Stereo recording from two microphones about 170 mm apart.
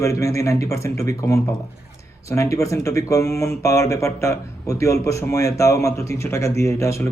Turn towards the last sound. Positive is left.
turn(degrees=15)  # may be behind; listen again after turning